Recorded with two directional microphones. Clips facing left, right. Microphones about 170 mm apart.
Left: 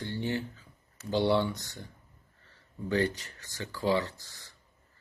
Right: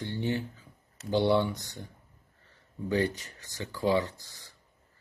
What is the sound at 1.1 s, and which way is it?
Speech, 15° right (ahead or behind).